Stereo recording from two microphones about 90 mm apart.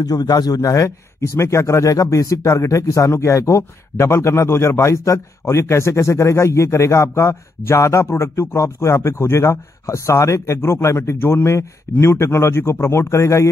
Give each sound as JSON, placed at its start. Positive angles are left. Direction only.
{"t": 0.0, "sound": "speech", "side_deg": 45}